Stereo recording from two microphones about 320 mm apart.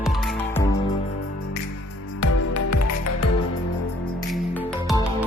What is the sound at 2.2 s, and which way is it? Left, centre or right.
Music, left.